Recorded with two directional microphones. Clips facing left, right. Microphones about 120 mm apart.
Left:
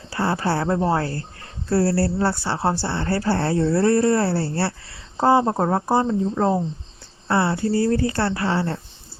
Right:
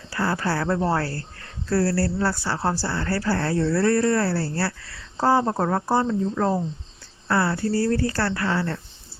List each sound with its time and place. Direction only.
0.1 s speech: 25° left (ahead or behind)